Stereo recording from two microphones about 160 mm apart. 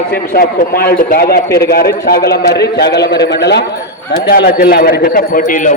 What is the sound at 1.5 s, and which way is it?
A man's voice, 80° left.